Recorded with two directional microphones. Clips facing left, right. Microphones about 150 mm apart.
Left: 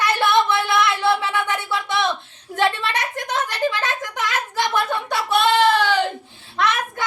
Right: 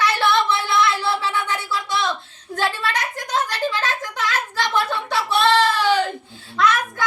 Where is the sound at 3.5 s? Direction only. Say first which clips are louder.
Left 1 dB; 20° left (ahead or behind).